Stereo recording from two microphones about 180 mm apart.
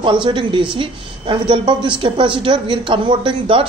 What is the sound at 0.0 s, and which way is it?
A woman's voice, 25° right (ahead or behind).